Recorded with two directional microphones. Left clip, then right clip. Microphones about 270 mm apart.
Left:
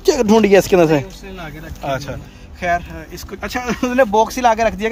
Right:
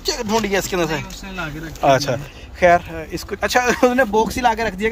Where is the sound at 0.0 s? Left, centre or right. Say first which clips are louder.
Left 7 dB; left.